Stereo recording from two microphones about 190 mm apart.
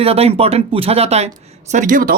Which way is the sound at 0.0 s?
30° right (ahead or behind).